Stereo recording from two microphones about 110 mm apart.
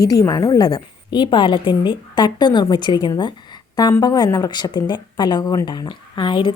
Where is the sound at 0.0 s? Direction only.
35° left (ahead or behind).